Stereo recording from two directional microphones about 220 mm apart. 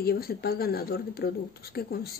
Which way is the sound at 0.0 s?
45° left (ahead or behind).